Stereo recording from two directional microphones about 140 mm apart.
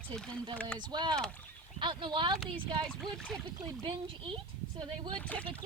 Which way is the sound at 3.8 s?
35° right (ahead or behind).